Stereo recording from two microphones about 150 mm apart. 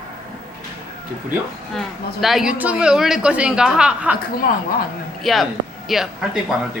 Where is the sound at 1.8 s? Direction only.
Centre (ahead or behind).